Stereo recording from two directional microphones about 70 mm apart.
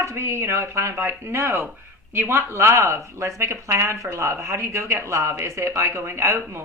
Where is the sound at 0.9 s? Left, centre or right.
Right.